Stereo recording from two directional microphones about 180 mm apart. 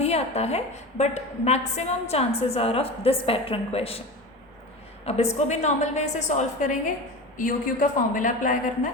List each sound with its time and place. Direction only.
0.0 s a woman's voice: 35° left (ahead or behind)
5.0 s a woman's voice: 35° left (ahead or behind)